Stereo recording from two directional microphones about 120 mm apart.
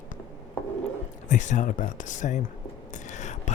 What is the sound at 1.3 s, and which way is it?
Speech, 90° left.